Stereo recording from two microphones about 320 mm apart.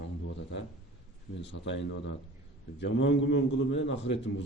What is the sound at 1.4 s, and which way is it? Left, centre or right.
A man's voice, left.